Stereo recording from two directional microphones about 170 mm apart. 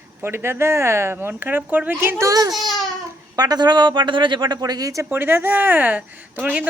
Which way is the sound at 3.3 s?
25° right (ahead or behind).